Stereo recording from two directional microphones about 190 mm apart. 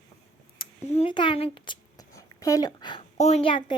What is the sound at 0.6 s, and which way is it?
Speech, 30° left (ahead or behind).